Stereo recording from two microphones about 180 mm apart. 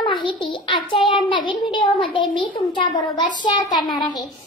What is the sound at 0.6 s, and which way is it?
A child's voice, 30° left (ahead or behind).